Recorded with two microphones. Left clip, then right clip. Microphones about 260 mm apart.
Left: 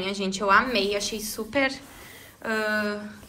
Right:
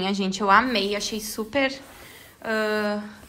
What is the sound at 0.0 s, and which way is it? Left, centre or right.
A woman's voice, right.